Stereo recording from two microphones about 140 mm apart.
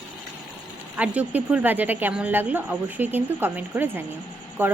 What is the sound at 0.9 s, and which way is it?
A woman's voice, 10° right (ahead or behind).